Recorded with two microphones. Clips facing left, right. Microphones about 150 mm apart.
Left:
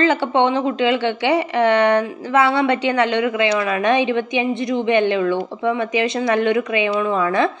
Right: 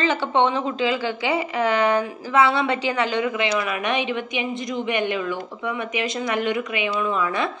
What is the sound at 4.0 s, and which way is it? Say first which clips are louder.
A woman's voice: left 7 dB; 25° left (ahead or behind).